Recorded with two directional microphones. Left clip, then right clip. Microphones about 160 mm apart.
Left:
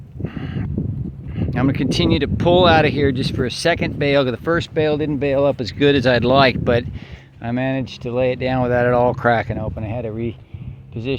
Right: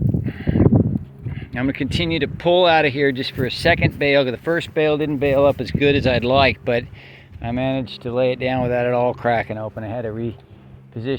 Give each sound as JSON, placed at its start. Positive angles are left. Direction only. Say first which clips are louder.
{"t": 0.3, "sound": "a sound", "louder": "right 11 dB", "side_deg": 30}
{"t": 1.4, "sound": "speech", "louder": "left 3 dB", "side_deg": 25}
{"t": 4.5, "sound": "speech", "louder": "right 1 dB", "side_deg": 20}
{"t": 5.7, "sound": "speech", "louder": "left 2 dB", "side_deg": 40}
{"t": 7.4, "sound": "speech", "louder": "even", "side_deg": 20}
{"t": 9.5, "sound": "speech", "louder": "even", "side_deg": 10}